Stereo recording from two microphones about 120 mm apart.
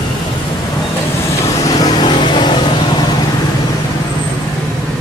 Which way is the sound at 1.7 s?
35° left (ahead or behind).